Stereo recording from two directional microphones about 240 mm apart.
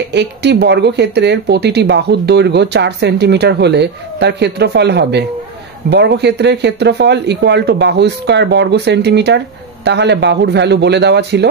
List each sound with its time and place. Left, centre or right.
0.1 s speech: right